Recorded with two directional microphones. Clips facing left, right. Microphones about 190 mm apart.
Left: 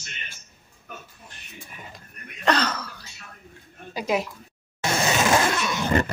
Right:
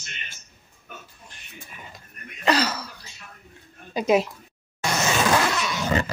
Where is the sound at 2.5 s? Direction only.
10° right (ahead or behind).